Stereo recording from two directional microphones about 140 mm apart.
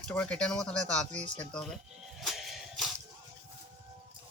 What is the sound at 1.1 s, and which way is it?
Speech, 60° right (ahead or behind).